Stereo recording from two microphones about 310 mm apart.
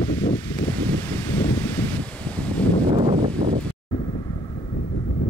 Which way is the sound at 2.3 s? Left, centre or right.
Centre.